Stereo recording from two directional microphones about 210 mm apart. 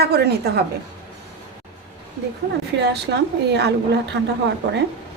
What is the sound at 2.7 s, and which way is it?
Speech, 50° right (ahead or behind).